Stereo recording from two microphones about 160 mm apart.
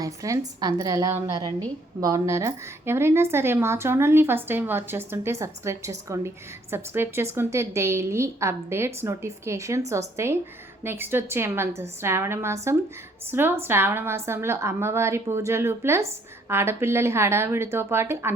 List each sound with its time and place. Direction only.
0.0 s a woman's voice: 20° right (ahead or behind)